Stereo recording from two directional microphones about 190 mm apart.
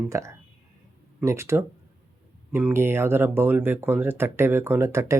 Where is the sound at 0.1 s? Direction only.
15° right (ahead or behind).